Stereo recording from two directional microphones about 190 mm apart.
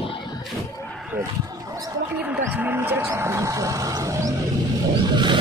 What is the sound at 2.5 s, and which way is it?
Wild animals, 10° right (ahead or behind).